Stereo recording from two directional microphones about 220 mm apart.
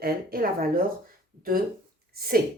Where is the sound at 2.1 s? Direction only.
45° right (ahead or behind).